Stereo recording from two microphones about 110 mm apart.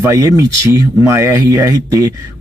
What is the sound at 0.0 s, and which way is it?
Speech, 30° right (ahead or behind).